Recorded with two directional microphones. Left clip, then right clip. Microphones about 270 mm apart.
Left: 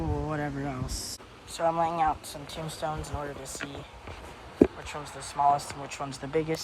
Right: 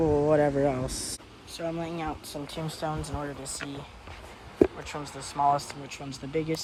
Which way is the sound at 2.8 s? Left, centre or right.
Right.